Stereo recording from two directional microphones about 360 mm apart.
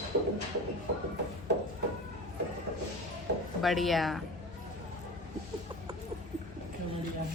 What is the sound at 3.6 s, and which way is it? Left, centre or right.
Speech, centre.